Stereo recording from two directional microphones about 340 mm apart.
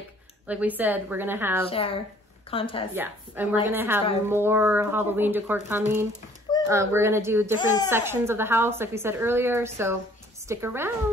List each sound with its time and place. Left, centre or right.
0.5 s a woman's voice: centre
1.7 s a woman's voice: centre
2.9 s a woman's voice: centre
6.5 s a sound: centre
6.9 s a woman's voice: centre